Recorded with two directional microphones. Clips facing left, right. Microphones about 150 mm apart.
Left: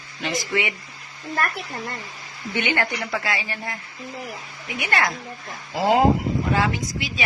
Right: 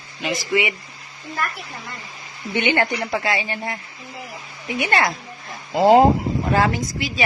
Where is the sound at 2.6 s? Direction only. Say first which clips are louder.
Right 4 dB; 25° right (ahead or behind).